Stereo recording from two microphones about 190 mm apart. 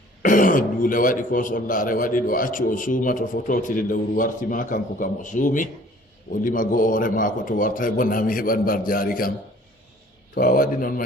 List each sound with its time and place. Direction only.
0.2 s a man's voice: 45° left (ahead or behind)
10.3 s a man's voice: 50° left (ahead or behind)